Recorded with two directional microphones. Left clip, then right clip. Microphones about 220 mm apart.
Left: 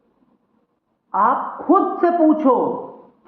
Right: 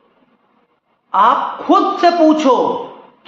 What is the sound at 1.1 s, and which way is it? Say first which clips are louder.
A man's voice: right 5 dB; 25° right (ahead or behind).